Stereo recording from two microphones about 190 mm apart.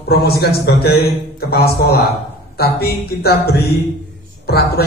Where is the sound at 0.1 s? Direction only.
55° left (ahead or behind).